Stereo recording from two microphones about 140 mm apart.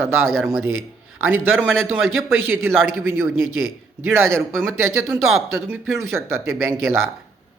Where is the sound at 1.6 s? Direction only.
15° right (ahead or behind).